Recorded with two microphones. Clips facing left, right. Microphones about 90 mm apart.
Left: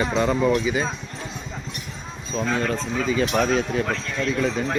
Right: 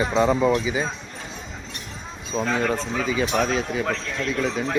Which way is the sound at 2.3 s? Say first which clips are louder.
Right 1 dB; 15° right (ahead or behind).